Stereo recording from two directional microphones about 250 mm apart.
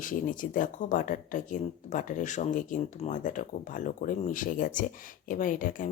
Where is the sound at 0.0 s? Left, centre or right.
Left.